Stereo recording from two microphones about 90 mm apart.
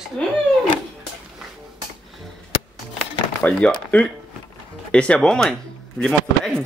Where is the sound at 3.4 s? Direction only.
15° left (ahead or behind).